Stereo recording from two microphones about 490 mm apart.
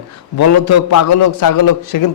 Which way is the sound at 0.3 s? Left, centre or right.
Left.